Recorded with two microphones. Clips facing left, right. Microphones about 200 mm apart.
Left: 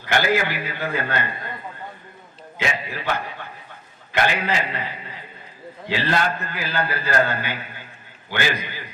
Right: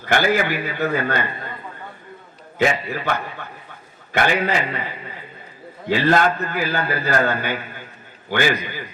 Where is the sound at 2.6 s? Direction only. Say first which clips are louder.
Right 7 dB; 50° right (ahead or behind).